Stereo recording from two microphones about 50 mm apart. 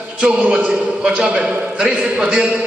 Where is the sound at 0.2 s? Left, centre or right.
Right.